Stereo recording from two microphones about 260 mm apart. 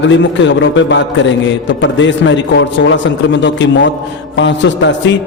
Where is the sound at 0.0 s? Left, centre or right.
Left.